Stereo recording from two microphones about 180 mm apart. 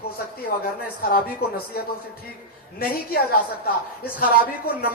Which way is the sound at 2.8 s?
55° left (ahead or behind).